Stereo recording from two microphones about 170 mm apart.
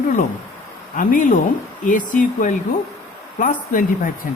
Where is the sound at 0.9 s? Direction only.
50° left (ahead or behind).